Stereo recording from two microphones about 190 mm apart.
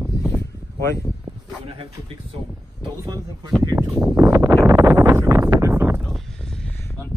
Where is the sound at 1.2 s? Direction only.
25° right (ahead or behind).